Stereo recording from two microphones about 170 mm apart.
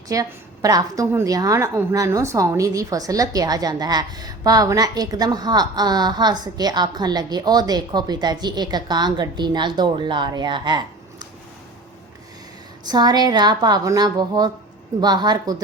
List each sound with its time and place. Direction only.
0.1 s a woman's voice: 20° right (ahead or behind)
12.9 s a woman's voice: 25° right (ahead or behind)